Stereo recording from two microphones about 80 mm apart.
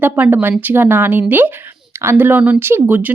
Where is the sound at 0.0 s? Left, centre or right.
Right.